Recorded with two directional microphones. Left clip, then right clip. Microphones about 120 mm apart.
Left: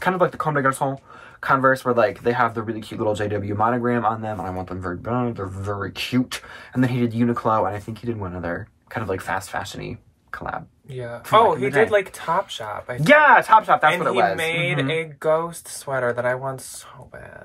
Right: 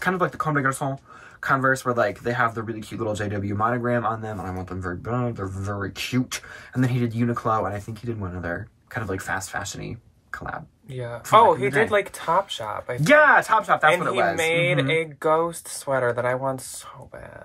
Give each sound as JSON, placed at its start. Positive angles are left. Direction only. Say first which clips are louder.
{"t": 0.0, "sound": "speech", "louder": "left 3 dB", "side_deg": 15}
{"t": 11.0, "sound": "speech", "louder": "even", "side_deg": -45}
{"t": 13.0, "sound": "speech", "louder": "left 2 dB", "side_deg": 15}
{"t": 14.4, "sound": "speech", "louder": "right 1 dB", "side_deg": -50}